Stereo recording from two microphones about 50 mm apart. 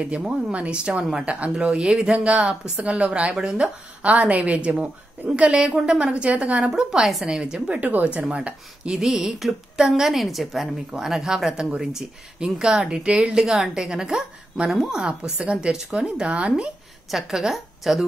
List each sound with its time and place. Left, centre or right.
0.0 s speech: right
3.3 s speech: centre
6.7 s a woman's voice: centre
9.0 s a woman's voice: centre; by 16.6 s right
17.1 s a woman's voice: centre